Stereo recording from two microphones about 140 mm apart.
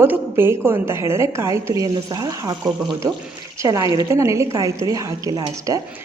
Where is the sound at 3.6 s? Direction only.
25° right (ahead or behind).